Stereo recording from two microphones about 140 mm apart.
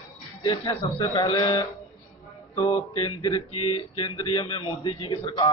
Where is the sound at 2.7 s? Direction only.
35° left (ahead or behind).